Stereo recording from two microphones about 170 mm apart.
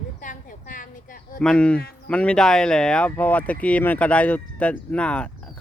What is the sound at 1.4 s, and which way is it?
Speech, 5° left (ahead or behind).